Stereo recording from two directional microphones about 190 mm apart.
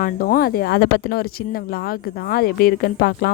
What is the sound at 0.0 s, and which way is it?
Speech, 45° left (ahead or behind).